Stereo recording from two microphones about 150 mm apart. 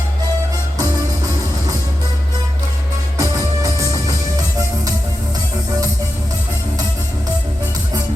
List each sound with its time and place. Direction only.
3.2 s music: 20° right (ahead or behind)